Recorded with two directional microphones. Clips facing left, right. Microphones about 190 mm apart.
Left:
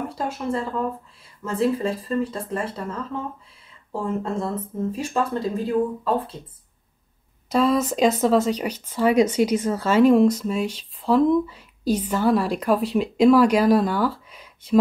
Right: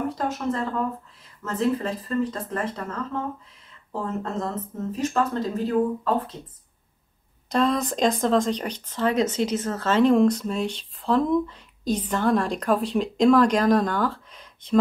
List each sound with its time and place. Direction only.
0.1 s speech: 10° left (ahead or behind)
7.4 s speech: 5° left (ahead or behind)